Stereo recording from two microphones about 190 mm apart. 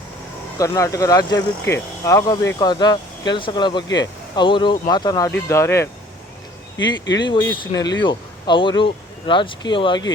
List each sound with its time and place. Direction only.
0.6 s speech: 15° left (ahead or behind)
7.5 s speech: 20° left (ahead or behind)